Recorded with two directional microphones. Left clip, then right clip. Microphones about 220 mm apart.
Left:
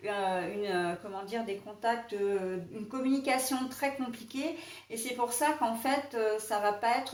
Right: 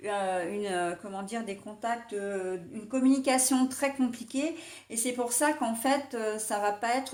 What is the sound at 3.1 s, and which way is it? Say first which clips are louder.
Speech: right 2 dB; 45° right (ahead or behind).